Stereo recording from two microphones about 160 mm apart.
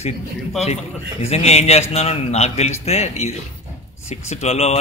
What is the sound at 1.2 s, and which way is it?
A man's voice, 40° left (ahead or behind).